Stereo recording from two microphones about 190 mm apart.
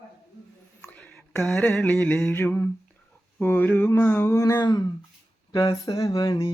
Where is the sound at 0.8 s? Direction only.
10° left (ahead or behind).